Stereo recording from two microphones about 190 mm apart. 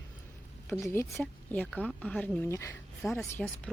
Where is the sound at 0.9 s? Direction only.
10° left (ahead or behind).